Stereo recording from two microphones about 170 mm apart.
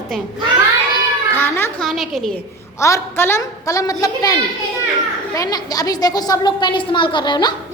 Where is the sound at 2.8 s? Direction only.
15° left (ahead or behind).